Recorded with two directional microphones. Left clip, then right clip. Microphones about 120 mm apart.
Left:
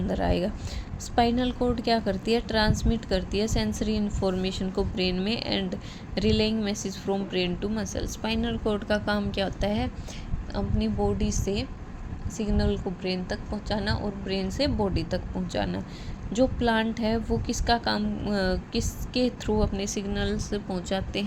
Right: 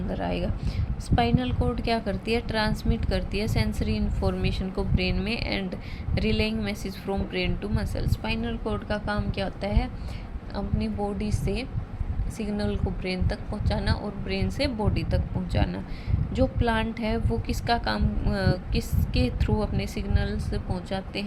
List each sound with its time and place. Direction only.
0.1 s a woman's voice: 30° left (ahead or behind)